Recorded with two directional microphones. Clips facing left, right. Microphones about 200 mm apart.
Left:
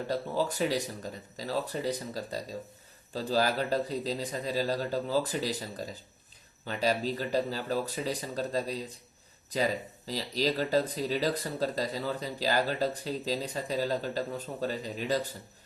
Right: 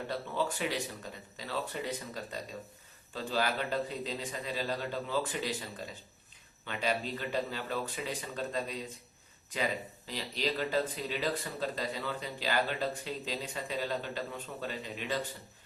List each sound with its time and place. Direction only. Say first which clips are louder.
0.1 s speech: left 4 dB; 40° left (ahead or behind)
10.1 s speech: left 5 dB; 40° left (ahead or behind)